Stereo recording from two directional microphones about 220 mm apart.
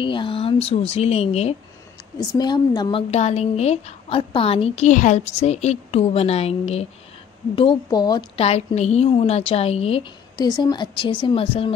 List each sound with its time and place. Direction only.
0.0 s a woman's voice: 20° left (ahead or behind)